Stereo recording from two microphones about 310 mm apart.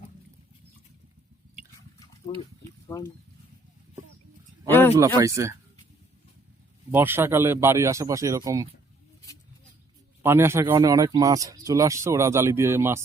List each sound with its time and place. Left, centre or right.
2.3 s speech: centre
4.7 s a sound: centre
4.9 s speech: centre
6.9 s speech: centre
10.2 s speech: centre